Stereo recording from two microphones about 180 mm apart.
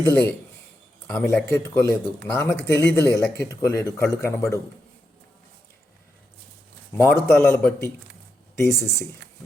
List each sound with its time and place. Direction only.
0.1 s a man's voice: 10° left (ahead or behind)
6.9 s a man's voice: 15° left (ahead or behind)